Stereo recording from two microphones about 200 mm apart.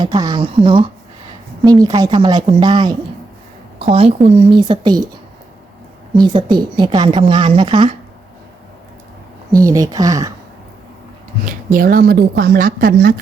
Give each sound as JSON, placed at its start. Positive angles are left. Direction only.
{"t": 0.0, "sound": "a woman's voice", "side_deg": -20}
{"t": 4.3, "sound": "a woman's voice", "side_deg": -30}
{"t": 6.1, "sound": "a woman's voice", "side_deg": -20}
{"t": 9.5, "sound": "a woman's voice", "side_deg": -15}
{"t": 11.4, "sound": "a woman's voice", "side_deg": -45}